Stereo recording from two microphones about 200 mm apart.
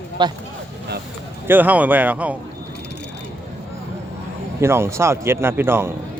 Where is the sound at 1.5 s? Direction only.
10° right (ahead or behind).